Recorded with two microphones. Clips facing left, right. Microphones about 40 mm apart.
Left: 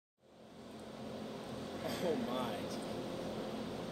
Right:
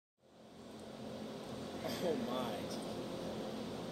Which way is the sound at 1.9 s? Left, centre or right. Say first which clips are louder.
Left 1 dB; centre.